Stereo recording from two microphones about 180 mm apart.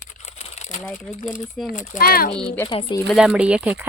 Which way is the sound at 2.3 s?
30° left (ahead or behind).